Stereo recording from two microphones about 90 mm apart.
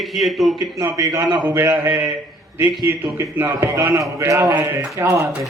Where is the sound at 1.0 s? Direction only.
40° right (ahead or behind).